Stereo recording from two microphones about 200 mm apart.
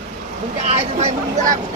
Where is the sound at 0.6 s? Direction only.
35° right (ahead or behind).